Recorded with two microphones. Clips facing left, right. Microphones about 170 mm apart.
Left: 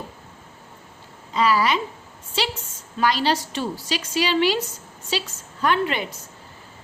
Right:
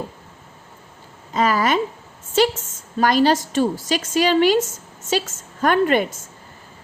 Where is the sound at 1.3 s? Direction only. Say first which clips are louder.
Right 2 dB; 50° right (ahead or behind).